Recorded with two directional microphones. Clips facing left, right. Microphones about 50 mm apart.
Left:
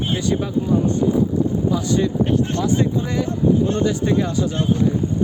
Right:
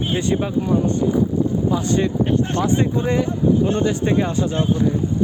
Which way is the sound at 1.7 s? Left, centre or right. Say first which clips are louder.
Even; right.